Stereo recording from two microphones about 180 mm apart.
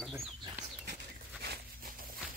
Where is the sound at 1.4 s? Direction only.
55° right (ahead or behind).